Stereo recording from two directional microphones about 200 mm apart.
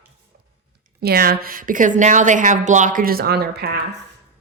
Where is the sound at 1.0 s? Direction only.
50° right (ahead or behind).